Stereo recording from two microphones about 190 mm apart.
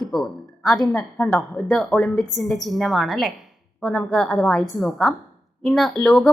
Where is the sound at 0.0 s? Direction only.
Centre (ahead or behind).